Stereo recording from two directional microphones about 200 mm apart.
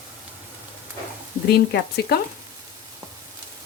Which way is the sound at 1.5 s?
55° left (ahead or behind).